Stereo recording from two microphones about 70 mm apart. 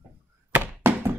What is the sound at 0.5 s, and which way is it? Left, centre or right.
Thunk, right.